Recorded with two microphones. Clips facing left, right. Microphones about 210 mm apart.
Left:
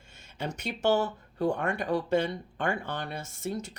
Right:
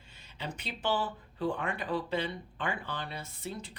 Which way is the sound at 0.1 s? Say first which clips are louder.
Left 5 dB; 45° left (ahead or behind).